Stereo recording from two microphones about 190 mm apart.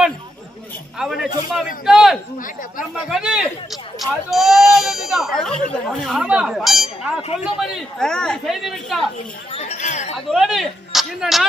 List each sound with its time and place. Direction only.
0.9 s speech: centre (ahead or behind)
7.2 s speech: 30° left (ahead or behind)
7.6 s speech: centre (ahead or behind)
9.5 s chink: 35° left (ahead or behind)
10.3 s speech: centre (ahead or behind)